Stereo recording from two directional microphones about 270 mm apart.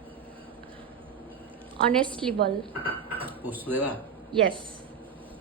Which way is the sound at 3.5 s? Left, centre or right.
Centre.